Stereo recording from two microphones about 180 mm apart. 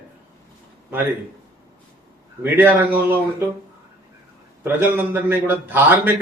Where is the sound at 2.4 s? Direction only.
10° right (ahead or behind).